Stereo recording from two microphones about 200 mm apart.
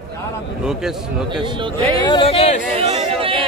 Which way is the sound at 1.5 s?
25° right (ahead or behind).